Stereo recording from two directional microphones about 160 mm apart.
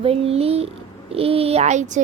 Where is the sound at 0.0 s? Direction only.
40° right (ahead or behind).